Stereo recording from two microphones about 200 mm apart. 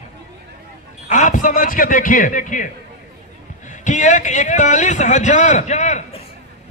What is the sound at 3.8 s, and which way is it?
A man's voice, 40° left (ahead or behind).